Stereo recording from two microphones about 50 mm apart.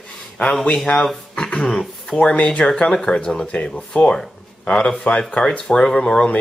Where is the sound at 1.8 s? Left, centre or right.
Centre.